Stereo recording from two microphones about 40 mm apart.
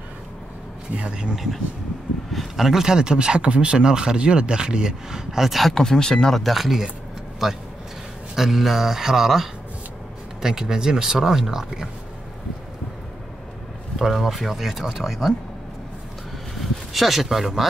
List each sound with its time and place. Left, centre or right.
1.0 s speech: right
1.3 s speech: centre
5.5 s speech: centre
5.8 s speech: centre
6.4 s speech: centre
13.9 s speech: centre
16.9 s speech: centre